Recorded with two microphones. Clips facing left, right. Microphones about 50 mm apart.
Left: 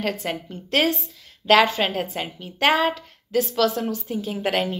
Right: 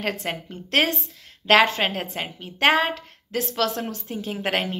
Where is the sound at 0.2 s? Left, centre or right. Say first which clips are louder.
Left 1 dB; centre.